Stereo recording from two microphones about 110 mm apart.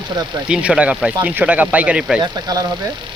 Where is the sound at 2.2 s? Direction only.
35° right (ahead or behind).